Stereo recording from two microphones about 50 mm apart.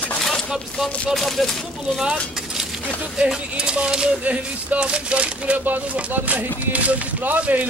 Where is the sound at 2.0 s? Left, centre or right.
Centre.